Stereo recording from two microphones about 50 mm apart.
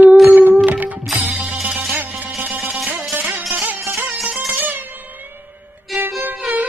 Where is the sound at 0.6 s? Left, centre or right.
Right.